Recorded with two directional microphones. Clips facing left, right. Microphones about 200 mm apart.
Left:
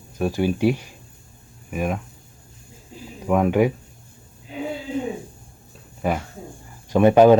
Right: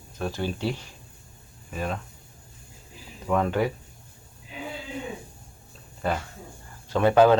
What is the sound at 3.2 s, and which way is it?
Speech, 10° left (ahead or behind).